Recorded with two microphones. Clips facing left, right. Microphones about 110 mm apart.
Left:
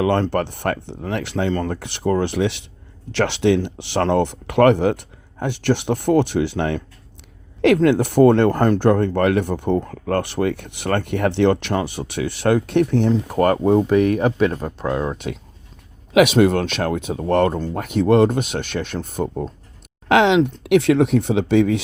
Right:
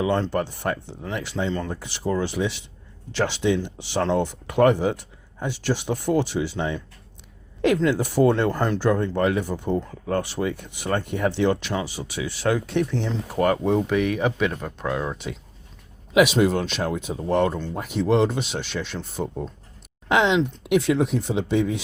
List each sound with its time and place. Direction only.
0.0 s speech: 65° left (ahead or behind); by 15.1 s 35° left (ahead or behind)
16.1 s speech: 70° left (ahead or behind); by 19.3 s 50° left (ahead or behind)
20.1 s speech: 85° left